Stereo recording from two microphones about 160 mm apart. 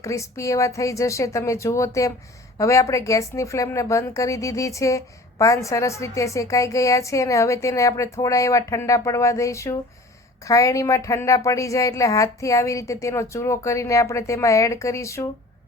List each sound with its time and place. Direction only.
0.0 s a woman's voice: 20° left (ahead or behind)